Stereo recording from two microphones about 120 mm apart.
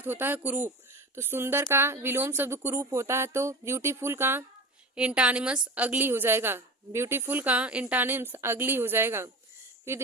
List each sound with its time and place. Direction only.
0.0 s a woman's voice: 15° right (ahead or behind)